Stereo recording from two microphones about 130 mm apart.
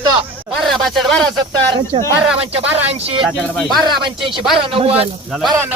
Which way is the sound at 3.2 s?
Centre (ahead or behind).